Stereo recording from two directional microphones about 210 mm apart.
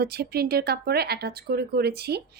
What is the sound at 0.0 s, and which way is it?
Speech, 50° right (ahead or behind).